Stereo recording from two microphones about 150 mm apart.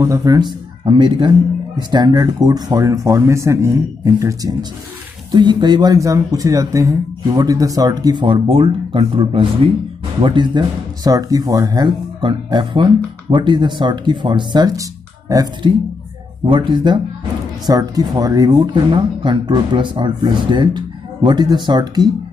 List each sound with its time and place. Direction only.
0.0 s speech: 20° right (ahead or behind)